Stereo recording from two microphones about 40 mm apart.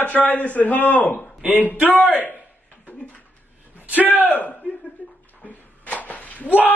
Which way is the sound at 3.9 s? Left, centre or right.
Right.